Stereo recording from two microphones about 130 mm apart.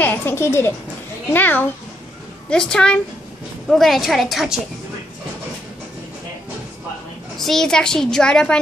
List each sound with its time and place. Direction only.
0.0 s a woman's voice: 15° left (ahead or behind); by 4.6 s centre (ahead or behind)
7.3 s a woman's voice: centre (ahead or behind)